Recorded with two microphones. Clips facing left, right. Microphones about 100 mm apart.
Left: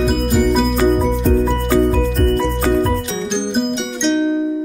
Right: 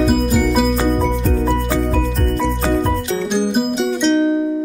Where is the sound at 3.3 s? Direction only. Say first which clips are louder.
Right 1 dB; 5° right (ahead or behind).